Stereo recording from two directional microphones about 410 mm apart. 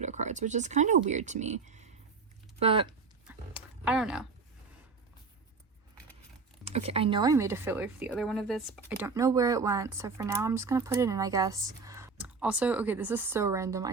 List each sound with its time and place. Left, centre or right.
0.0 s speech: centre
3.2 s dog: centre
6.7 s speech: centre